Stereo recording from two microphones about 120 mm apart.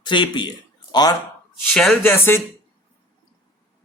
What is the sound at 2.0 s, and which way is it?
Speech, 20° left (ahead or behind).